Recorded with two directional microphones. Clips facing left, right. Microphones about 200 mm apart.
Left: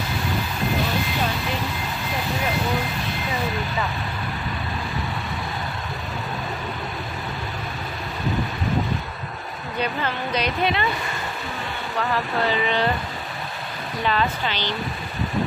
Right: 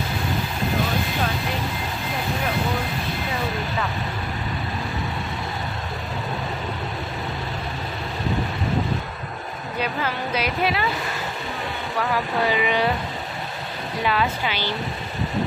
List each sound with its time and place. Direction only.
9.8 s speech: 5° right (ahead or behind)
12.1 s speech: 10° right (ahead or behind)
14.0 s speech: 10° right (ahead or behind)